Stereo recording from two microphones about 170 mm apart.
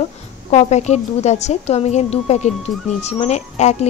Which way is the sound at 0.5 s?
40° left (ahead or behind).